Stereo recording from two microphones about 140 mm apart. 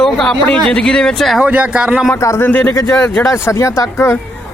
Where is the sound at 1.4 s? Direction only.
10° right (ahead or behind).